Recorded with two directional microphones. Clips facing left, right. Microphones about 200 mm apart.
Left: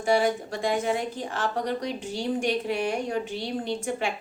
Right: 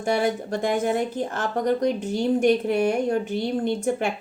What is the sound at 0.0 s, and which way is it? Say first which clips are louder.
A woman's voice: even; 55° right (ahead or behind).